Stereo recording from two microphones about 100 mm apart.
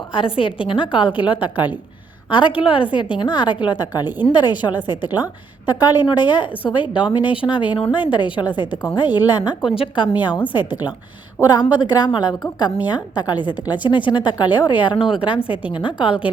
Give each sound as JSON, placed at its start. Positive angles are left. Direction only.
{"t": 0.1, "sound": "a woman's voice", "side_deg": 60}
{"t": 9.7, "sound": "a woman's voice", "side_deg": 60}